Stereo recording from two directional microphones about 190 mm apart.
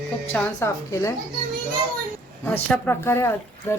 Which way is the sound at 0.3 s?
10° left (ahead or behind).